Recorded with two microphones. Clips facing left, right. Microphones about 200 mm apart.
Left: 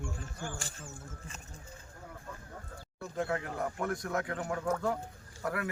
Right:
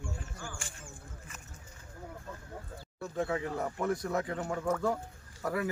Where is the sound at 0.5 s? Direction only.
35° left (ahead or behind).